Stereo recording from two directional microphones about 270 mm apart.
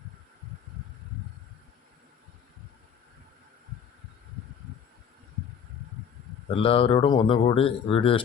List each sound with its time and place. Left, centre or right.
6.5 s speech: left